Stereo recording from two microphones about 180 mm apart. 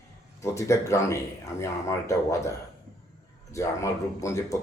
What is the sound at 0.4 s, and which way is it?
Speech, 15° left (ahead or behind).